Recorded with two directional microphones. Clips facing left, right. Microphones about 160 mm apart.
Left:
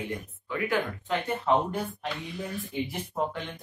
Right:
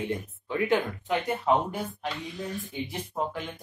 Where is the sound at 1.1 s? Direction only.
10° right (ahead or behind).